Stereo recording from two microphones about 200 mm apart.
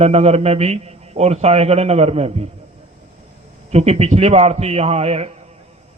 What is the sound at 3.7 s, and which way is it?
Speech, 35° right (ahead or behind).